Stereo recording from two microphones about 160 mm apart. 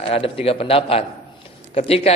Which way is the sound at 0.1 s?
35° left (ahead or behind).